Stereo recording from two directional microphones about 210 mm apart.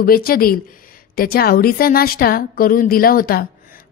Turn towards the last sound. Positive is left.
turn(degrees=45)  # may be behind; listen again after turning